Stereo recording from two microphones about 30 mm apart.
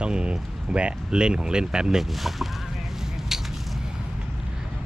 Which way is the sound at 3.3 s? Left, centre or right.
Centre.